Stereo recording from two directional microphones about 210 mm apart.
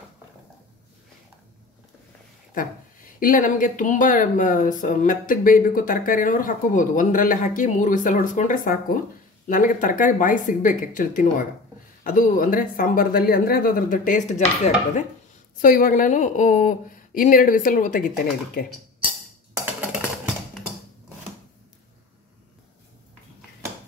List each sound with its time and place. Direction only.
2.5 s speech: 40° left (ahead or behind)
15.6 s speech: 40° left (ahead or behind)
19.6 s typing: 5° right (ahead or behind)